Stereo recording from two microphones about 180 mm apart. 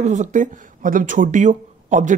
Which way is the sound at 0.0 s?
45° right (ahead or behind).